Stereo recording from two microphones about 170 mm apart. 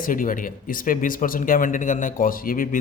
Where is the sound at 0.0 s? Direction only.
55° left (ahead or behind).